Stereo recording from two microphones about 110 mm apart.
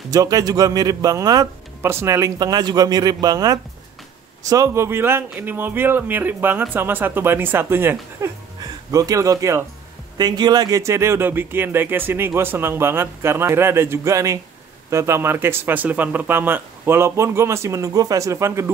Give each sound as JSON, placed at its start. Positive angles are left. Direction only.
{"t": 0.1, "sound": "speech", "side_deg": -35}
{"t": 1.8, "sound": "speech", "side_deg": -20}
{"t": 8.9, "sound": "speech", "side_deg": -30}
{"t": 10.1, "sound": "speech", "side_deg": -40}